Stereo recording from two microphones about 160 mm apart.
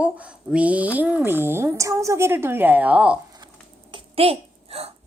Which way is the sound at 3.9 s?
35° right (ahead or behind).